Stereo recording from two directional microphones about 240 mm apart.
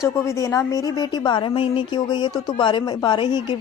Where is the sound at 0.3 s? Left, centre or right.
Centre.